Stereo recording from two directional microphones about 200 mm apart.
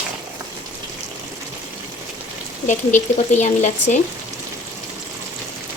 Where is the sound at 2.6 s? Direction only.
35° left (ahead or behind).